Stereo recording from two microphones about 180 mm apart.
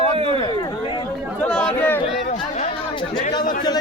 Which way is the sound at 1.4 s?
5° left (ahead or behind).